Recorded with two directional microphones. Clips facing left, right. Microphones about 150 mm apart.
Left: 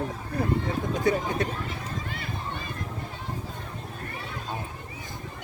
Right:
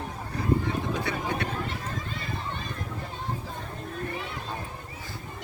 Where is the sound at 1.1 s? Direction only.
45° left (ahead or behind).